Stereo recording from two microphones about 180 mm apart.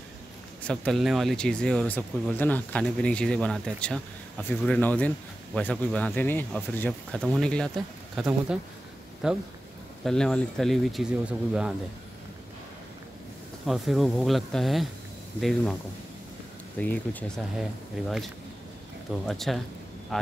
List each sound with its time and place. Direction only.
0.6 s speech: 5° left (ahead or behind)
13.7 s speech: centre (ahead or behind)
16.7 s speech: 10° left (ahead or behind)